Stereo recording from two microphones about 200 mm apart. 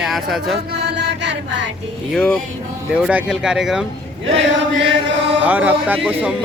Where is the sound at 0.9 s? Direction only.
60° right (ahead or behind).